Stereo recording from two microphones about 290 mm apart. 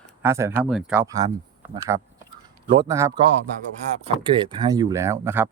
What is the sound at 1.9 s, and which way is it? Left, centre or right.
Speech, right.